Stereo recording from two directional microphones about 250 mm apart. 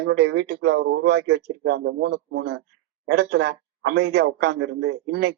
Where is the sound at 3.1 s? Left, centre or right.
Right.